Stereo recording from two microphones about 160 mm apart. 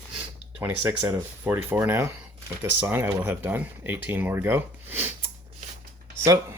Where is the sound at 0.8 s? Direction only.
20° right (ahead or behind).